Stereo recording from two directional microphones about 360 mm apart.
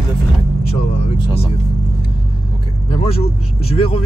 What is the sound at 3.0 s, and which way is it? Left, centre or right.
Speech, centre.